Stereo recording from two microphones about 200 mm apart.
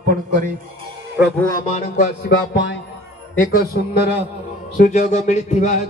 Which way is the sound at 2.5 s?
60° left (ahead or behind).